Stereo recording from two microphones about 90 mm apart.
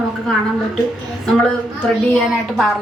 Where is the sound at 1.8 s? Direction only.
5° left (ahead or behind).